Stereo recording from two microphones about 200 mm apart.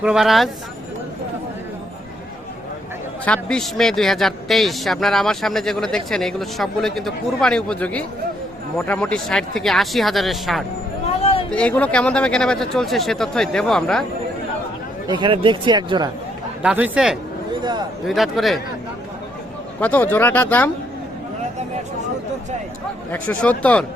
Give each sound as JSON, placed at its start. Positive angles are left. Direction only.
{"t": 0.0, "sound": "speech", "side_deg": 0}
{"t": 3.2, "sound": "speech", "side_deg": 5}
{"t": 11.2, "sound": "a sound", "side_deg": 30}
{"t": 11.5, "sound": "speech", "side_deg": 5}
{"t": 15.0, "sound": "speech", "side_deg": -20}
{"t": 16.6, "sound": "speech", "side_deg": -5}
{"t": 17.5, "sound": "a sound", "side_deg": -20}
{"t": 18.0, "sound": "speech", "side_deg": 0}
{"t": 19.8, "sound": "speech", "side_deg": 10}
{"t": 23.1, "sound": "speech", "side_deg": 5}